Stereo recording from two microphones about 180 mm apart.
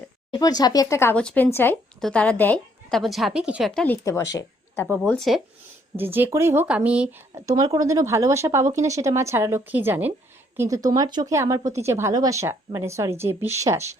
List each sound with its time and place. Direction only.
0.3 s speech: 20° left (ahead or behind); by 3.8 s 5° right (ahead or behind)
3.8 s speech: 15° left (ahead or behind)
6.0 s speech: 10° right (ahead or behind)